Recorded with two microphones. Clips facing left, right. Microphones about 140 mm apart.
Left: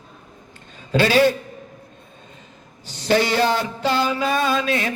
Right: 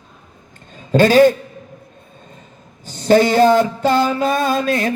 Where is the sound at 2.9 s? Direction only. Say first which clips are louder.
Right 6 dB; 45° right (ahead or behind).